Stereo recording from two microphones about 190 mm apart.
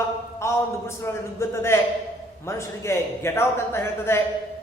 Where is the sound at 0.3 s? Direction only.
15° left (ahead or behind).